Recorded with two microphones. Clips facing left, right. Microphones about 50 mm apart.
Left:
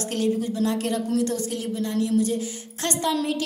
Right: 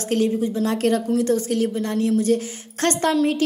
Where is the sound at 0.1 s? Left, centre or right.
Right.